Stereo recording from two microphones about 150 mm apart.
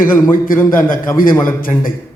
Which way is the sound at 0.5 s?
70° left (ahead or behind).